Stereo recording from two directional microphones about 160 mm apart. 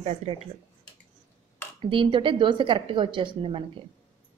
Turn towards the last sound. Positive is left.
turn(degrees=-30)  # may be behind; listen again after turning